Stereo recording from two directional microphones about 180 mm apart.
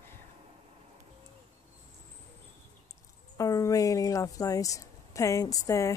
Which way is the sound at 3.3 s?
20° left (ahead or behind).